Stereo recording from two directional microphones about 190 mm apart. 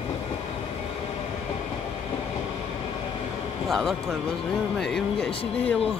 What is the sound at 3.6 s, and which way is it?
Speech, centre (ahead or behind).